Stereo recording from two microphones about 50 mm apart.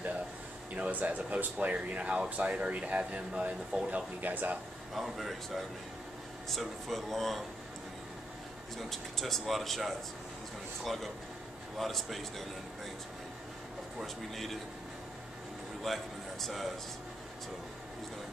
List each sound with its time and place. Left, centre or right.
0.7 s speech: right
4.2 s speech: right
4.9 s speech: centre
8.9 s speech: centre
14.0 s speech: centre
15.8 s a man's voice: centre